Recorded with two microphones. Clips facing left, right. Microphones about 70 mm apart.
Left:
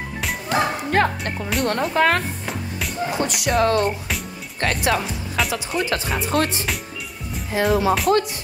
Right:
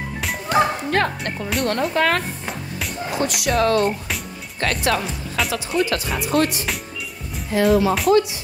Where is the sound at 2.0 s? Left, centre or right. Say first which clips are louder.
Left 1 dB; left.